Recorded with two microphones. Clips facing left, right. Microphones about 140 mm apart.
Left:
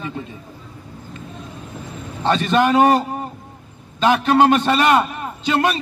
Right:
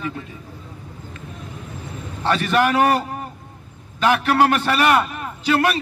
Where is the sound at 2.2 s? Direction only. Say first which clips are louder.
Left 2 dB; 20° left (ahead or behind).